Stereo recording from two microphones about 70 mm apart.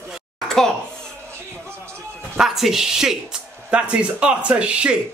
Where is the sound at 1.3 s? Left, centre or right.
Right.